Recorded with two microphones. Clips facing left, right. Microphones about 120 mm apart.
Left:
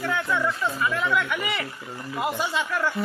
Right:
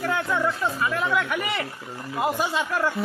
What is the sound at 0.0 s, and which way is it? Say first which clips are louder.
Speech: right 1 dB; 35° right (ahead or behind).